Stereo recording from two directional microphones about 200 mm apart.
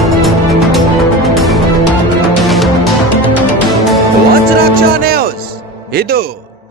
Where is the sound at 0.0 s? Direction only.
Centre (ahead or behind).